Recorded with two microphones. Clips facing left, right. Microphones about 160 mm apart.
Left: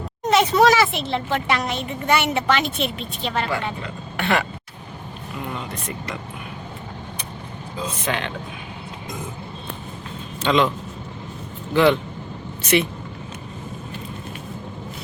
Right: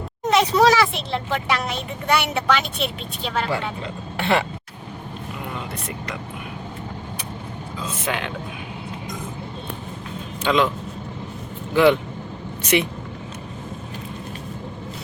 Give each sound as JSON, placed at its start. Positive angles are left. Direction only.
{"t": 0.3, "sound": "speech", "side_deg": 0}
{"t": 4.2, "sound": "speech", "side_deg": -25}
{"t": 8.0, "sound": "speech", "side_deg": -5}
{"t": 10.4, "sound": "speech", "side_deg": -5}
{"t": 11.7, "sound": "speech", "side_deg": -10}